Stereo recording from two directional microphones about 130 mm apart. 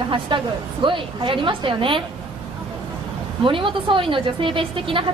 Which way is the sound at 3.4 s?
40° right (ahead or behind).